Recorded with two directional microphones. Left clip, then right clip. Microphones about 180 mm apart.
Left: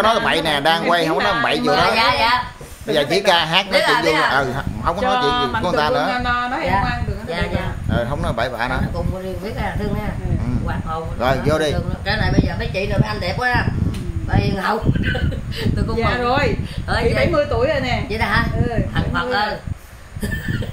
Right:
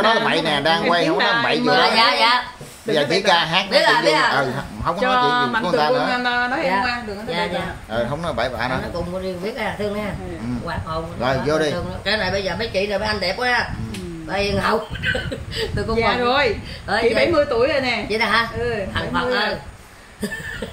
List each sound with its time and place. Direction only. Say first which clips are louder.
0.0 s speech: left 1 dB; 30° left (ahead or behind)
1.7 s speech: right 1 dB; 5° left (ahead or behind)
2.9 s speech: left 1 dB; 25° left (ahead or behind)
3.7 s a man's voice: right 2 dB; 10° left (ahead or behind)
4.3 s a man's voice: left 1 dB; 30° left (ahead or behind)
5.1 s a woman's voice: right 3 dB; 25° right (ahead or behind)
5.6 s a man's voice: even; 30° left (ahead or behind)
7.9 s speech: left 1 dB; 25° left (ahead or behind)
11.1 s speech: left 2 dB; 30° left (ahead or behind)
12.1 s a man's voice: even; centre (ahead or behind)
16.1 s a woman's voice: even; 30° right (ahead or behind)
18.1 s a man's voice: right 2 dB; 5° left (ahead or behind)